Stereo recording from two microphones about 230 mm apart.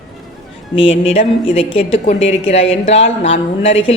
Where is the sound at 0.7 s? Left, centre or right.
Left.